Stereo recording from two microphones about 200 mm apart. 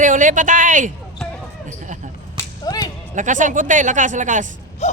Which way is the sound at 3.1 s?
40° right (ahead or behind).